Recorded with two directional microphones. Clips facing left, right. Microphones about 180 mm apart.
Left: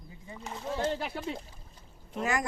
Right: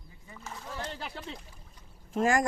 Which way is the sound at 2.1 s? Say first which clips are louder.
Right 5 dB; 45° right (ahead or behind).